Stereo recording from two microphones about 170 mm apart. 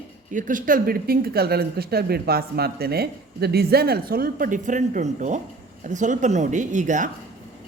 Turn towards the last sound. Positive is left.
turn(degrees=-45)  # may be behind; listen again after turning